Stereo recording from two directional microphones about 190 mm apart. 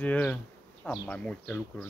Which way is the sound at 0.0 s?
10° left (ahead or behind).